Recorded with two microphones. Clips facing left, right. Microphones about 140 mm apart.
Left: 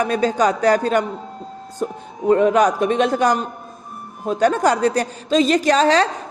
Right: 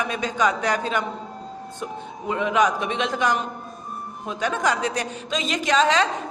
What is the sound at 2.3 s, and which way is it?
A woman's voice, 40° left (ahead or behind).